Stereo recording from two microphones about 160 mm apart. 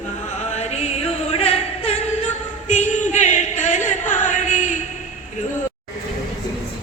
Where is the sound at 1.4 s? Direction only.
40° left (ahead or behind).